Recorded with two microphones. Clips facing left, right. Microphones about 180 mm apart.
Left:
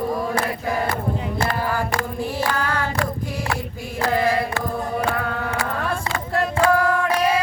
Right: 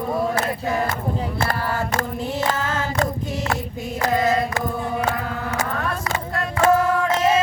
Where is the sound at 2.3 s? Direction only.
20° right (ahead or behind).